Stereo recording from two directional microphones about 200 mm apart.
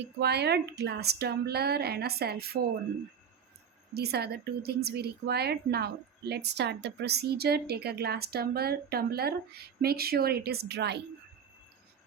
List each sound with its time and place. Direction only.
0.0 s a woman's voice: 55° right (ahead or behind)
3.9 s a woman's voice: 55° right (ahead or behind)